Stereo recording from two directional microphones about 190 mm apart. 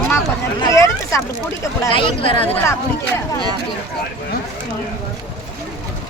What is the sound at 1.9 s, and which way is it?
Speech, 25° left (ahead or behind).